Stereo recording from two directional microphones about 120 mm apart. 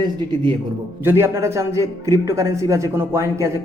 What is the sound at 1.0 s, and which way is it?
A man's voice, 20° right (ahead or behind).